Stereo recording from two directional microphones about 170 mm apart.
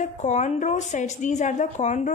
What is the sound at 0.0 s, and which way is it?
A woman's voice, 45° left (ahead or behind).